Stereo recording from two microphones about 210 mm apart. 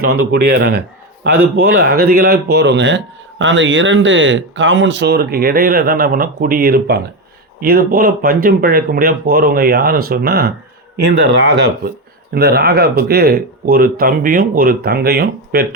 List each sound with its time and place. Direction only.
0.0 s speech: 50° right (ahead or behind)
12.3 s speech: 50° right (ahead or behind)